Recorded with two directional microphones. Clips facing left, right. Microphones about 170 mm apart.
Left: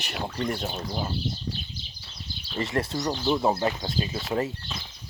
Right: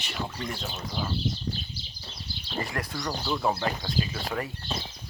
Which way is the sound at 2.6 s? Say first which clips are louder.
Left 5 dB; 25° left (ahead or behind).